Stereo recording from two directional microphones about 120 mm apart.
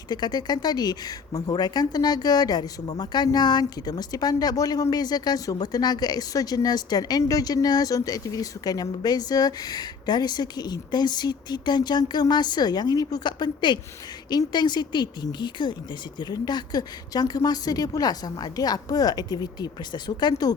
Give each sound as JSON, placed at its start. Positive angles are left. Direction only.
{"t": 0.1, "sound": "speech", "side_deg": 35}